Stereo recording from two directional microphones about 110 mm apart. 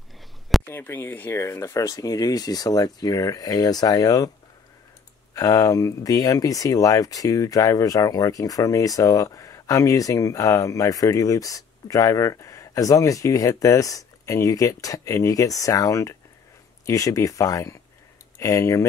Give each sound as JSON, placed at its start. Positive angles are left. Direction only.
{"t": 0.7, "sound": "speech", "side_deg": 20}
{"t": 5.3, "sound": "speech", "side_deg": 30}